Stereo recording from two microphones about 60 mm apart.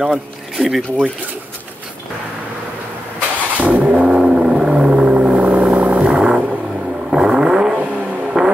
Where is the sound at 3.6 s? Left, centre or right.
Right.